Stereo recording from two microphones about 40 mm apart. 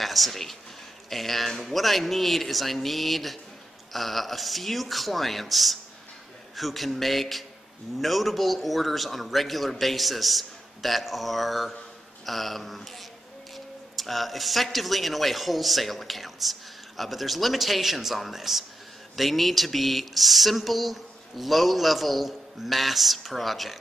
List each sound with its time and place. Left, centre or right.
0.0 s speech: centre
13.9 s speech: centre